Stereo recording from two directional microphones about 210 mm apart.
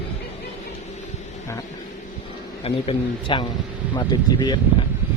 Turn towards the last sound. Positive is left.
turn(degrees=20)  # may be behind; listen again after turning